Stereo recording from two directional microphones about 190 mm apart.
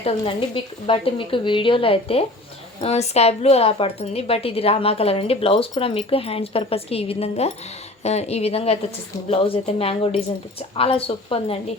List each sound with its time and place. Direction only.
0.0 s speech: 30° left (ahead or behind)